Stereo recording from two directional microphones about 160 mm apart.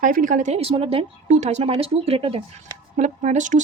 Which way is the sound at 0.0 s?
55° right (ahead or behind).